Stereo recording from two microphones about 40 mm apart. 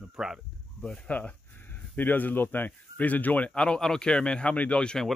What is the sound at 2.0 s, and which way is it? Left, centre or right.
Speech, left.